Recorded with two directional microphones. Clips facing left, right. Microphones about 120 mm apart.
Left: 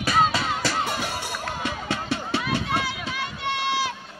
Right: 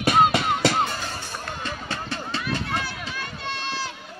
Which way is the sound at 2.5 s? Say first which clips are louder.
Left 2 dB; 10° left (ahead or behind).